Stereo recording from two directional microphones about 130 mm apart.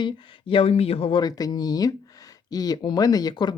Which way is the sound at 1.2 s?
30° left (ahead or behind).